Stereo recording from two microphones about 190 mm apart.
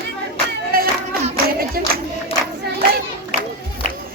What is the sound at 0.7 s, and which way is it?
Music, 50° right (ahead or behind).